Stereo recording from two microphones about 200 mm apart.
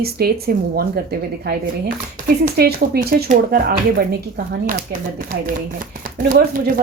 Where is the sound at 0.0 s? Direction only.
50° right (ahead or behind).